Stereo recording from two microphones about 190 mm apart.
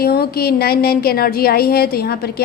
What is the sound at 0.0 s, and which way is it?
A woman's voice, 55° left (ahead or behind).